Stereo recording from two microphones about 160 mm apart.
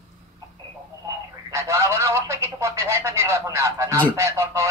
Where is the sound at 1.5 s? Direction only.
20° right (ahead or behind).